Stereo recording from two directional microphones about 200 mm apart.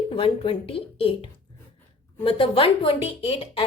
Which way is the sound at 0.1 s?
25° left (ahead or behind).